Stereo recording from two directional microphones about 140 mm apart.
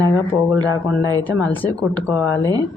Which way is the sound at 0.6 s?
25° right (ahead or behind).